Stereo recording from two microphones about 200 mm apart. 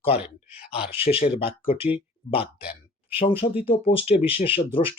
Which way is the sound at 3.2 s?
25° left (ahead or behind).